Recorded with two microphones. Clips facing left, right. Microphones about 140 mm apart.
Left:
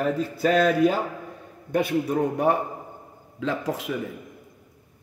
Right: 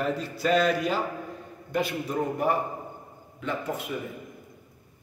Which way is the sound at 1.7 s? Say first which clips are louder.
Left 5 dB; 65° left (ahead or behind).